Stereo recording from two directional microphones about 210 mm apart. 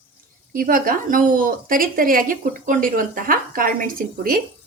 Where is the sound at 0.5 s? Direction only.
40° right (ahead or behind).